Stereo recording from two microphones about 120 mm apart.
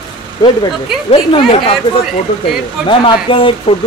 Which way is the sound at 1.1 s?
45° left (ahead or behind).